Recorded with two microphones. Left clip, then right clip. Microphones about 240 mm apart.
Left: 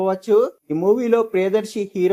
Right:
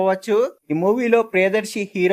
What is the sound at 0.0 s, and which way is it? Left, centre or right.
Speech, right.